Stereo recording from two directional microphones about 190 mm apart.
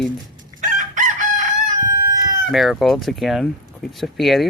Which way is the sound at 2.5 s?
Centre (ahead or behind).